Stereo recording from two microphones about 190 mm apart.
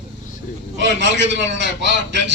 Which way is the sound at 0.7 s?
70° right (ahead or behind).